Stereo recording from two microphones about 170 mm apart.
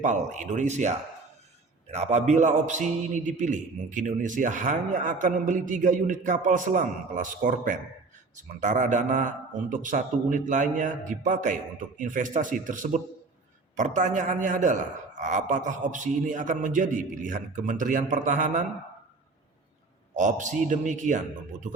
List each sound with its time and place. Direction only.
0.0 s a man's voice: 45° right (ahead or behind)
20.1 s a man's voice: 45° right (ahead or behind)